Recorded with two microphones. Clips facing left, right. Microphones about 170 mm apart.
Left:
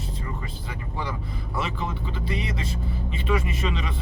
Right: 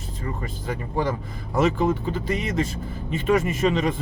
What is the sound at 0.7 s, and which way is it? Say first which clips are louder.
Speech: right 8 dB; 45° right (ahead or behind).